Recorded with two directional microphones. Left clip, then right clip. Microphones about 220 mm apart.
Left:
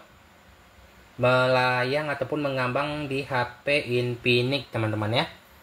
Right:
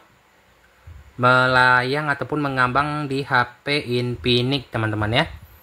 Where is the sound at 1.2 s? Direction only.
35° right (ahead or behind).